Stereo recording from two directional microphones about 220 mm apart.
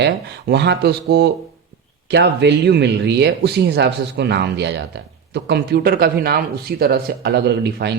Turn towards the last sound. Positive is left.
turn(degrees=-50)  # may be behind; listen again after turning